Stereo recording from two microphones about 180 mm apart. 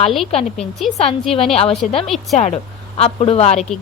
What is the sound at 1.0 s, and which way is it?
Speech, 35° left (ahead or behind).